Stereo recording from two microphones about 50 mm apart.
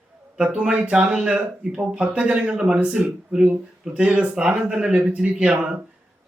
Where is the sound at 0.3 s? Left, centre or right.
Right.